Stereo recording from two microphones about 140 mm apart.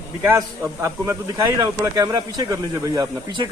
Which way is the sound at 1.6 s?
25° right (ahead or behind).